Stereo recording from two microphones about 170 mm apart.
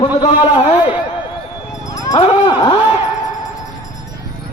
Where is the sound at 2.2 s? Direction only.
30° left (ahead or behind).